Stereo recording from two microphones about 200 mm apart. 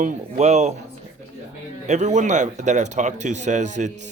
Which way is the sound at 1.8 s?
35° right (ahead or behind).